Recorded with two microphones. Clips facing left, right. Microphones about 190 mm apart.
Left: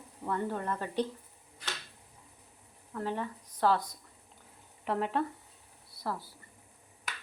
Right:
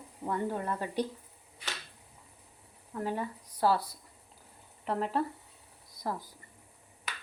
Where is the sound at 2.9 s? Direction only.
10° right (ahead or behind).